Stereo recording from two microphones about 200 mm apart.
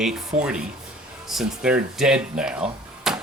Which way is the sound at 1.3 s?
5° right (ahead or behind).